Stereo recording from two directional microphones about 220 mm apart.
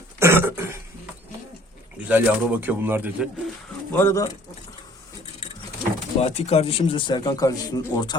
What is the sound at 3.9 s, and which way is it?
Speech, 10° left (ahead or behind).